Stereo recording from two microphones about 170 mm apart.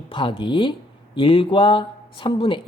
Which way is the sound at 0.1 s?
30° left (ahead or behind).